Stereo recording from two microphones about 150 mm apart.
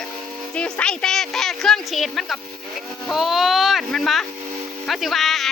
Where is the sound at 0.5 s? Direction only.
10° left (ahead or behind).